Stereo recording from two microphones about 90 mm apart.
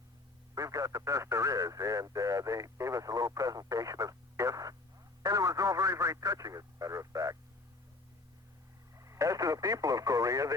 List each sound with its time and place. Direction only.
0.5 s speech: 40° right (ahead or behind)
9.0 s speech: 35° right (ahead or behind)